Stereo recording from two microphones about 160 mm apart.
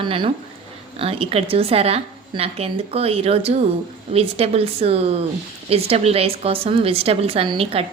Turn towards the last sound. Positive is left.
turn(degrees=-35)  # may be behind; listen again after turning